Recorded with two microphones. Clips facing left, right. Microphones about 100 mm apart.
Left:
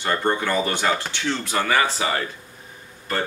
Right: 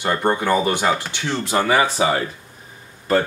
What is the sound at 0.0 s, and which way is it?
Speech, 15° right (ahead or behind).